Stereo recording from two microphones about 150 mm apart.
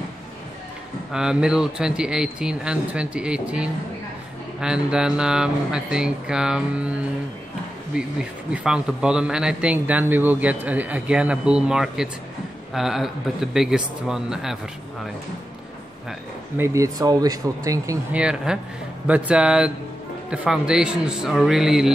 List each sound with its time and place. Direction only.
1.1 s speech: 5° right (ahead or behind)
7.9 s speech: 5° right (ahead or behind)
16.5 s speech: 20° right (ahead or behind)
18.1 s speech: 5° right (ahead or behind)